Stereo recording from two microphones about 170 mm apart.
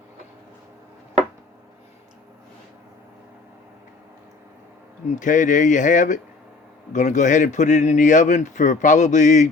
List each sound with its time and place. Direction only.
5.1 s speech: 50° left (ahead or behind)